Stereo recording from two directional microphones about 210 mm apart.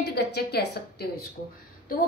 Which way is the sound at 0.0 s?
50° left (ahead or behind).